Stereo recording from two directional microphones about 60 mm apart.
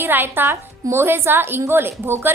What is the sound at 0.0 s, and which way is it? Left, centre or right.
A woman's voice, right.